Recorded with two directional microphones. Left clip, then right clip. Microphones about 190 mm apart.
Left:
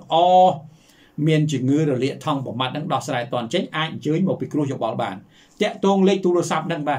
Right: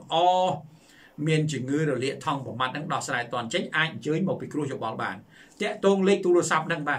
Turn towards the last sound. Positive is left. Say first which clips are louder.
# left 3 dB
turn(degrees=15)  # may be behind; listen again after turning